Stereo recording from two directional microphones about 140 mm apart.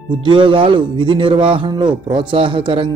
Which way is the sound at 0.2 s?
35° right (ahead or behind).